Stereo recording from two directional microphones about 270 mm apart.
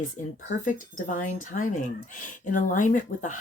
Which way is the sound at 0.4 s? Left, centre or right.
Left.